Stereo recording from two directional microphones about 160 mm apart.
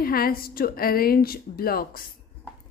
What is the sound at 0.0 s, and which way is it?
A woman's voice, 65° left (ahead or behind).